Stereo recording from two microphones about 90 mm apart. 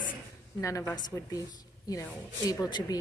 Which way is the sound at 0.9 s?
45° left (ahead or behind).